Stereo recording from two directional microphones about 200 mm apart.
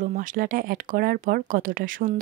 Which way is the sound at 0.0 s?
40° right (ahead or behind).